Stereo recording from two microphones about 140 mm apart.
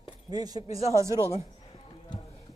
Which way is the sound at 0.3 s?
25° right (ahead or behind).